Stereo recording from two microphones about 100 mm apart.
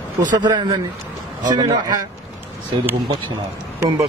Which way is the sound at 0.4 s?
45° right (ahead or behind).